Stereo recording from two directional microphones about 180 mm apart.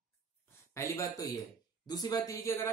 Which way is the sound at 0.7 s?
15° left (ahead or behind).